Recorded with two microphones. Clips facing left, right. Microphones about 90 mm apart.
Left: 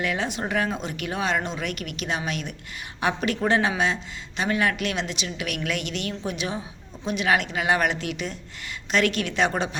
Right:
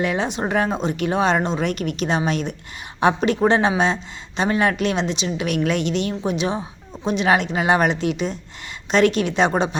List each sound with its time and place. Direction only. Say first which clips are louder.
0.0 s a woman's voice: right 5 dB; 25° right (ahead or behind)